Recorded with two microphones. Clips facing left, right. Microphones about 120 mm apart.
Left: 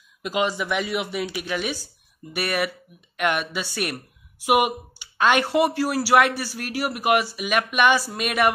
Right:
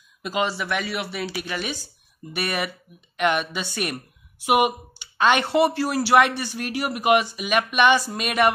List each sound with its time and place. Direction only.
0.2 s speech: 10° left (ahead or behind)